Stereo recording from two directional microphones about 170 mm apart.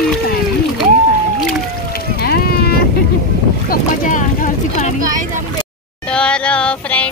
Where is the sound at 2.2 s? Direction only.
65° left (ahead or behind).